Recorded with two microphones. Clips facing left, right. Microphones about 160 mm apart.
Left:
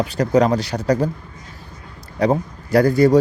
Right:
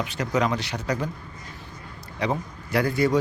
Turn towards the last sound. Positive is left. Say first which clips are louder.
# left 9 dB
turn(degrees=40)  # may be behind; listen again after turning